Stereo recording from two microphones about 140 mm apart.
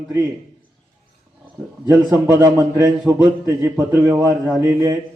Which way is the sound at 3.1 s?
15° right (ahead or behind).